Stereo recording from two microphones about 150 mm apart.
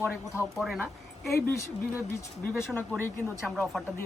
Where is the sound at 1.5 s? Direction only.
20° left (ahead or behind).